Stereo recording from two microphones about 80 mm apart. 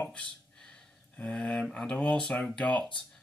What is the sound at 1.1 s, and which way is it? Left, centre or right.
Speech, centre.